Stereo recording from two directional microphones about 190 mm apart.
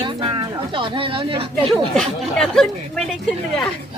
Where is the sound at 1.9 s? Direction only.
5° left (ahead or behind).